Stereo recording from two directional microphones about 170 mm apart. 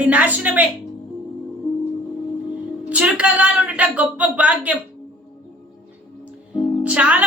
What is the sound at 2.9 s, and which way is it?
Speech, 5° right (ahead or behind).